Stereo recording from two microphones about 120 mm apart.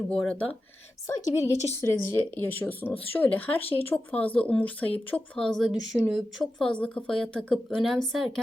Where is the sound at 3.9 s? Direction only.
10° left (ahead or behind); by 6.2 s 5° right (ahead or behind).